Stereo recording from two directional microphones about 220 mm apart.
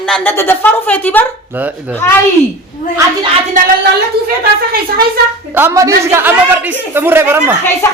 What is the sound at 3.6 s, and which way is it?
A woman's voice, 35° right (ahead or behind).